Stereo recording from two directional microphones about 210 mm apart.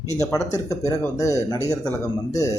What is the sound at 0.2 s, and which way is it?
Speech, 15° left (ahead or behind).